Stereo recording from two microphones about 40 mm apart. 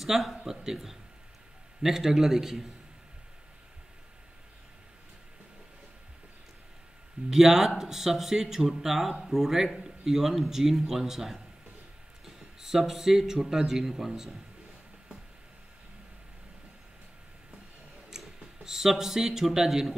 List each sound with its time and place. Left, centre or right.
0.0 s speech: centre
7.2 s speech: centre
12.5 s speech: centre
18.1 s speech: centre